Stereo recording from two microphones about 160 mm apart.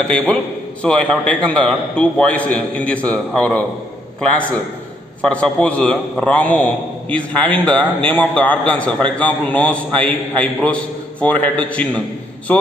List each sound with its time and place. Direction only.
0.1 s a man's voice: 5° left (ahead or behind)
5.2 s a man's voice: 5° left (ahead or behind)